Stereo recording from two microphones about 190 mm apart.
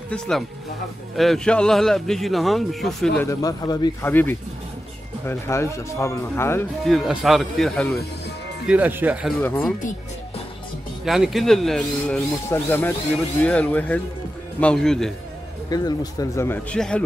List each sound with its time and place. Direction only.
0.1 s speech: centre (ahead or behind)
3.3 s speech: 20° left (ahead or behind)
4.0 s speech: 10° left (ahead or behind)
6.8 s speech: centre (ahead or behind)
8.6 s speech: 10° right (ahead or behind)
9.4 s speech: 5° left (ahead or behind)
11.1 s speech: centre (ahead or behind)
15.7 s speech: 20° left (ahead or behind)